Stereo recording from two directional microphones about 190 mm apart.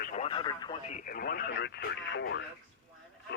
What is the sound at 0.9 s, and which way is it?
Speech, 45° left (ahead or behind).